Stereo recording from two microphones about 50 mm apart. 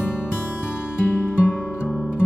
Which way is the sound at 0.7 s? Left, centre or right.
Left.